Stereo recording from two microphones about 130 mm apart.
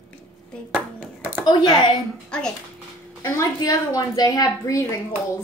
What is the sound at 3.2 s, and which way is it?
A woman's voice, 25° left (ahead or behind).